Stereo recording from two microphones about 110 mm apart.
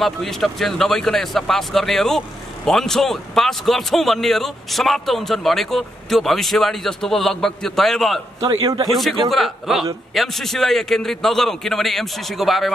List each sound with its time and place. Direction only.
0.0 s speech: centre (ahead or behind)
8.5 s speech: 45° right (ahead or behind)
9.3 s speech: centre (ahead or behind)